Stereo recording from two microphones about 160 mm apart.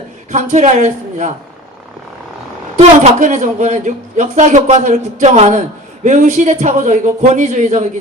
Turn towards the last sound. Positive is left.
turn(degrees=-50)  # may be behind; listen again after turning